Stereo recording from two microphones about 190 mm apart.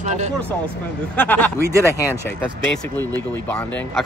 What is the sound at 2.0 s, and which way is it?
Speech, 15° left (ahead or behind).